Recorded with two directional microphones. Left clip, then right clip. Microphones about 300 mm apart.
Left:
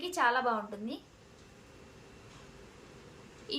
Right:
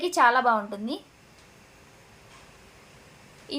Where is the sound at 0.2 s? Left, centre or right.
Centre.